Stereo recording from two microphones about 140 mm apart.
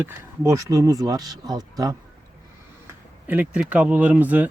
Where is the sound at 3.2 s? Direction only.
10° right (ahead or behind).